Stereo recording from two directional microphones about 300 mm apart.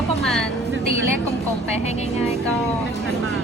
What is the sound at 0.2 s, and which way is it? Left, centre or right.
Vehicle, centre.